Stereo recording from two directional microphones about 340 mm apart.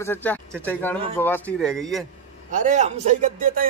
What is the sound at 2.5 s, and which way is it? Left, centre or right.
A man's voice, right.